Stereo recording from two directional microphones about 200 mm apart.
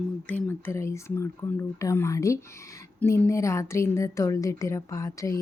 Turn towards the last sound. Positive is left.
turn(degrees=15)  # may be behind; listen again after turning